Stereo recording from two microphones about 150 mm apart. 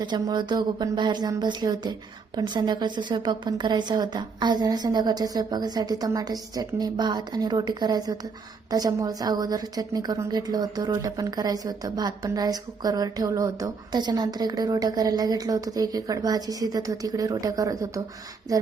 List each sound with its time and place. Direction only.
0.0 s a woman's voice: 30° right (ahead or behind)